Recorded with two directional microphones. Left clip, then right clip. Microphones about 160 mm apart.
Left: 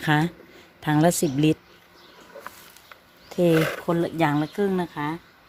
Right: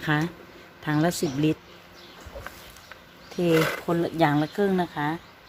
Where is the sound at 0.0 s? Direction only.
60° left (ahead or behind).